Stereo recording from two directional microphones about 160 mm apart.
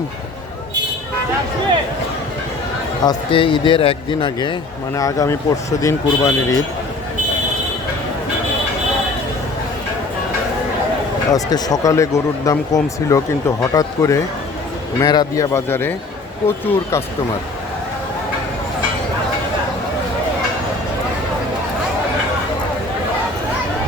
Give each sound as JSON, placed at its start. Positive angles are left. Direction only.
{"t": 3.0, "sound": "a man's voice", "side_deg": 30}
{"t": 4.9, "sound": "speech", "side_deg": 20}
{"t": 11.3, "sound": "speech", "side_deg": 20}